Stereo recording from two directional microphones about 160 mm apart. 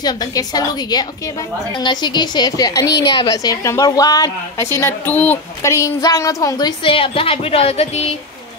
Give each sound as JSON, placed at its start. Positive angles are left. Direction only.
{"t": 0.0, "sound": "a woman's voice", "side_deg": 25}
{"t": 6.8, "sound": "speech", "side_deg": 35}